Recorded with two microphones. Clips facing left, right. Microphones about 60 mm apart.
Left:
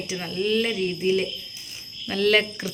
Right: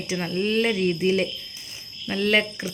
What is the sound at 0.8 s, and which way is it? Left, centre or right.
Speech, right.